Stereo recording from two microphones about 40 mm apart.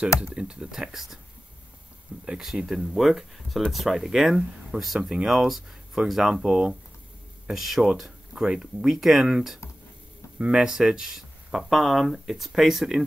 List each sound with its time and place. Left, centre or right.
0.0 s speech: right